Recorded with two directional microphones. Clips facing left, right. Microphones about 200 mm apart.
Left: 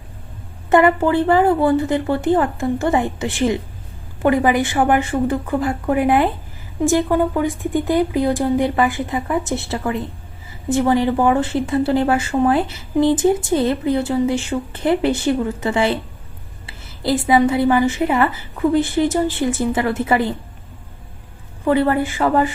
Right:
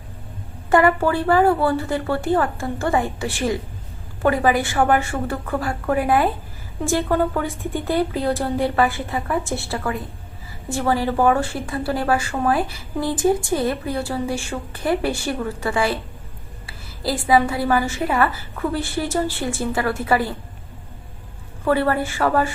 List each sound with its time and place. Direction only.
0.7 s a woman's voice: 20° left (ahead or behind)
21.6 s speech: 20° left (ahead or behind)